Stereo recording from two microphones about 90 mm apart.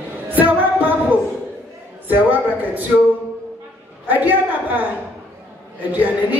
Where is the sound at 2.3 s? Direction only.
20° right (ahead or behind).